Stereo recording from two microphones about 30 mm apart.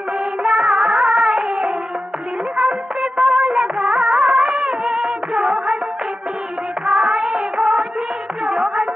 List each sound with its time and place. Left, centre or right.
0.4 s music of bollywood: right
6.9 s music of bollywood: right
8.5 s music: right